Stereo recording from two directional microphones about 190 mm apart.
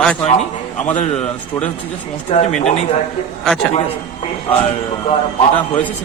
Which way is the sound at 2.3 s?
30° left (ahead or behind).